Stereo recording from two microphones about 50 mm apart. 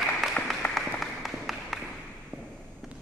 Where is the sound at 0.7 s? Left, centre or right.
Centre.